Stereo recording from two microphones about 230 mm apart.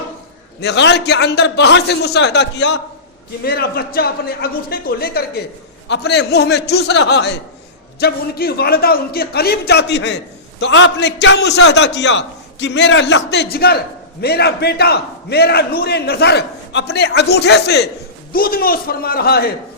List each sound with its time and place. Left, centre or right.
0.6 s a man's voice: left